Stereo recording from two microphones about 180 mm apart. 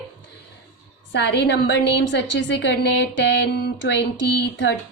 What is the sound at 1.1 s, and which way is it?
A woman's voice, 70° left (ahead or behind).